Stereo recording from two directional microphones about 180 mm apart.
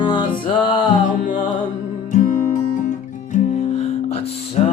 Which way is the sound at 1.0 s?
50° left (ahead or behind).